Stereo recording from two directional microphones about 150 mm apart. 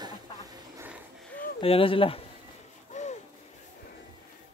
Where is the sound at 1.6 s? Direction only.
40° left (ahead or behind).